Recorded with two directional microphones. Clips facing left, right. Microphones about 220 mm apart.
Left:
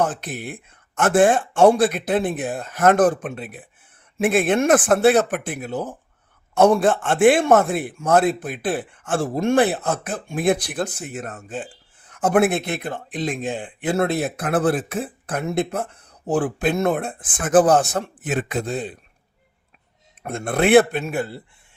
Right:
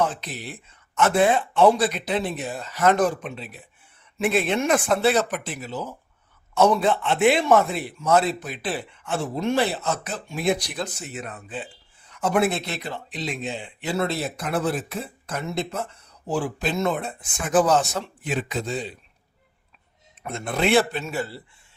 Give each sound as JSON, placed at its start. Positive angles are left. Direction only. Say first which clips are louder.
{"t": 0.0, "sound": "speech", "louder": "left 2 dB", "side_deg": 50}
{"t": 20.2, "sound": "speech", "louder": "left 4 dB", "side_deg": 50}